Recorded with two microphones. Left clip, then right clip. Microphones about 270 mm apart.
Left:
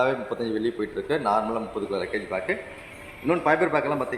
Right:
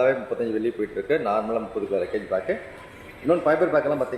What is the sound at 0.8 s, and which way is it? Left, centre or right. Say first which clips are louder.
Speech: right 3 dB; centre.